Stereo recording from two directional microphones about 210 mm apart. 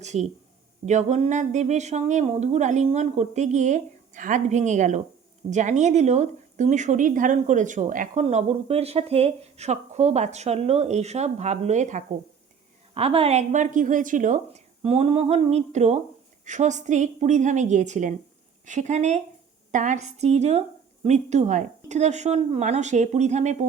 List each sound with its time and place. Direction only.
0.0 s a woman's voice: 35° right (ahead or behind)